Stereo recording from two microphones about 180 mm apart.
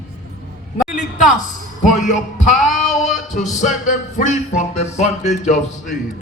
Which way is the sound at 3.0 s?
45° left (ahead or behind).